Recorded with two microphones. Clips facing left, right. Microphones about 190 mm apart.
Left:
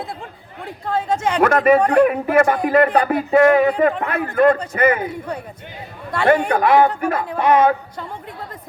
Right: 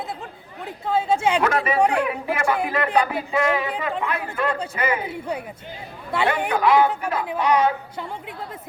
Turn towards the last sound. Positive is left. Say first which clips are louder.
# left 5 dB
turn(degrees=50)  # may be behind; listen again after turning